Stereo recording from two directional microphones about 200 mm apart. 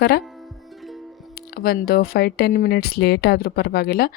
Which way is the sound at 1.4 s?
50° left (ahead or behind).